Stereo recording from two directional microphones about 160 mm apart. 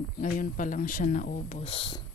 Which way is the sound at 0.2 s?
55° left (ahead or behind).